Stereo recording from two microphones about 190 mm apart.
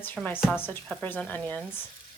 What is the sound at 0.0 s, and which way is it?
Speech, 10° left (ahead or behind).